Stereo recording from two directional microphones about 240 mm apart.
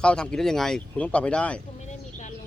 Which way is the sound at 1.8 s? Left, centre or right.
Left.